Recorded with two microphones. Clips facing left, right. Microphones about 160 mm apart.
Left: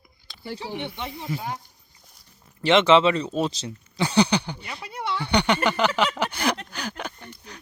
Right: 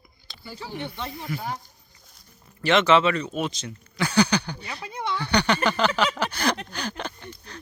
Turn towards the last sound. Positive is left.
turn(degrees=10)  # may be behind; listen again after turning